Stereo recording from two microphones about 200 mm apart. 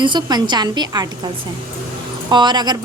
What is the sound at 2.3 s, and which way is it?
Speech, 20° right (ahead or behind).